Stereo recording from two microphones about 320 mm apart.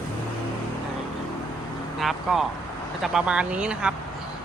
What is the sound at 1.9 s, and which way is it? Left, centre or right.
Speech, centre.